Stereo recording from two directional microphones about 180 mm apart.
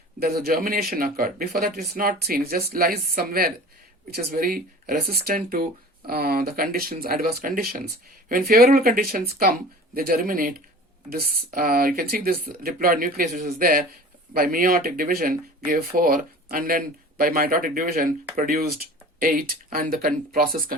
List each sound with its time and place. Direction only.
0.2 s speech: 55° right (ahead or behind)